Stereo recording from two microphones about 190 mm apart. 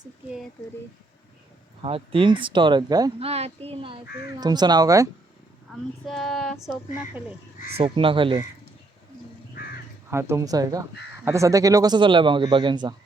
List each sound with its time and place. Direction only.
1.8 s speech: 30° right (ahead or behind)
3.2 s speech: 30° right (ahead or behind)
5.7 s speech: centre (ahead or behind)
7.7 s speech: 30° right (ahead or behind)
10.1 s speech: 15° right (ahead or behind)